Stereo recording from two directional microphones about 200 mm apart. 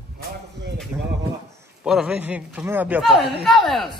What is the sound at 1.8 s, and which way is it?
Speech, 5° right (ahead or behind).